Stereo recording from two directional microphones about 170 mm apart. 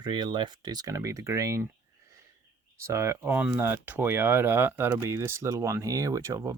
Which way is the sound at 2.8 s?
15° right (ahead or behind).